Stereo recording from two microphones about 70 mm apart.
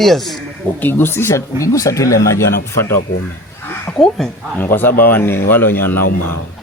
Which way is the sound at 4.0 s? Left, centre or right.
Centre.